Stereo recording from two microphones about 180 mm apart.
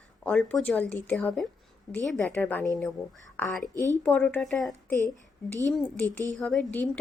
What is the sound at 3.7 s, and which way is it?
Speech, 20° right (ahead or behind).